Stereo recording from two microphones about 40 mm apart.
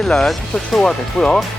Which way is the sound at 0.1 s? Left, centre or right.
Centre.